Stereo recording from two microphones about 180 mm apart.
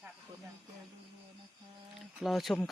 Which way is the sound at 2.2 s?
Centre (ahead or behind).